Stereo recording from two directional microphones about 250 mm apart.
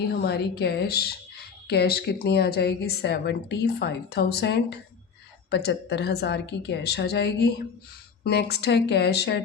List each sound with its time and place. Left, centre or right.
0.3 s speech: left